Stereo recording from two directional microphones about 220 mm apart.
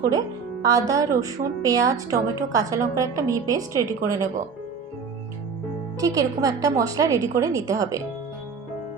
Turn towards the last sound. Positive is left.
turn(degrees=-15)  # may be behind; listen again after turning